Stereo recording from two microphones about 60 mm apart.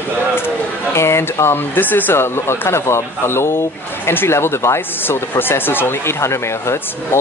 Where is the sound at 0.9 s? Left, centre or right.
Left.